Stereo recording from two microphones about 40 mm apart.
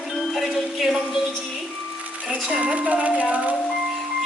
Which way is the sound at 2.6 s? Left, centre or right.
Right.